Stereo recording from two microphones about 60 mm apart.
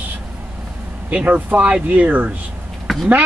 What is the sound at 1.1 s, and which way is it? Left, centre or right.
A man's voice, right.